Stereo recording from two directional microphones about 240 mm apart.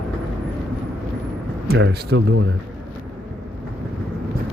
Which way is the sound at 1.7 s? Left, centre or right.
Right.